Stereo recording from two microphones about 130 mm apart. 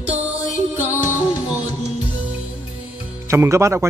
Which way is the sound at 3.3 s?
20° right (ahead or behind).